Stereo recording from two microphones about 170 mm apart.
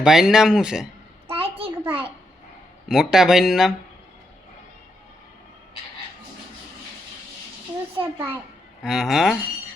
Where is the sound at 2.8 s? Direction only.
5° right (ahead or behind).